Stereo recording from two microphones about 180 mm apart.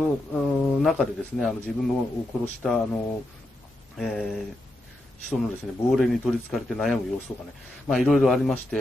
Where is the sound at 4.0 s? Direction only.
Centre (ahead or behind).